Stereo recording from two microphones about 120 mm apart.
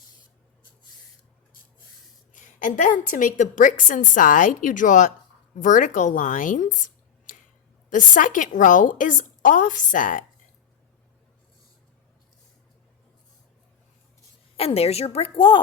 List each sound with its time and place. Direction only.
2.3 s a woman's voice: 90° left
14.5 s a woman's voice: 55° left (ahead or behind)